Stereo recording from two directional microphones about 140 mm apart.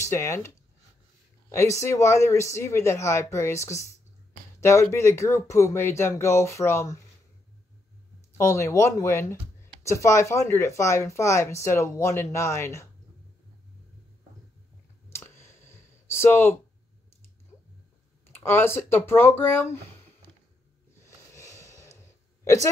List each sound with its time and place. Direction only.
0.0 s speech: 20° left (ahead or behind)
1.5 s speech: 20° left (ahead or behind)
8.5 s speech: 20° left (ahead or behind)
15.0 s a sound: 20° left (ahead or behind)
18.3 s speech: 15° left (ahead or behind)
21.0 s a sound: 20° left (ahead or behind)
22.4 s a woman's voice: 20° left (ahead or behind)